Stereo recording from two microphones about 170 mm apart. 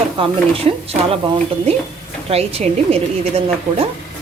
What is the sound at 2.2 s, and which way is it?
Speech, 35° right (ahead or behind).